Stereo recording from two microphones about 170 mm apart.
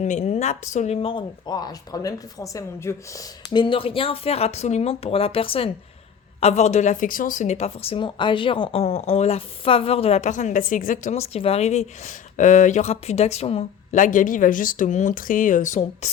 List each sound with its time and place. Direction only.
0.0 s a woman's voice: 45° left (ahead or behind)